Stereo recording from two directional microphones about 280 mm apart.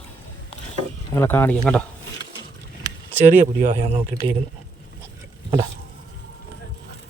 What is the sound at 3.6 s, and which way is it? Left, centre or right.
Speech, right.